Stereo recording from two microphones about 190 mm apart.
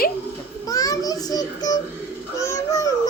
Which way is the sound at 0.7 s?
20° left (ahead or behind).